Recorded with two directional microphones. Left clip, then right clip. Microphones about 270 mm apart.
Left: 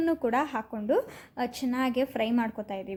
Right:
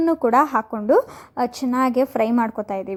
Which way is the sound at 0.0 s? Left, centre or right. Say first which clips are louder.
Right 10 dB; centre.